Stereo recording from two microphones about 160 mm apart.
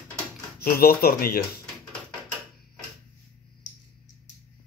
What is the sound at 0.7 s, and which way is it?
Speech, 70° left (ahead or behind).